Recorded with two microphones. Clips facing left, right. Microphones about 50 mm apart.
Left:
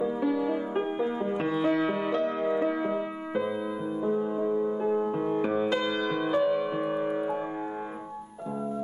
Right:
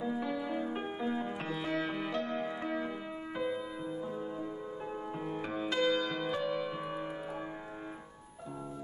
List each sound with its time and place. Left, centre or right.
0.0 s music: centre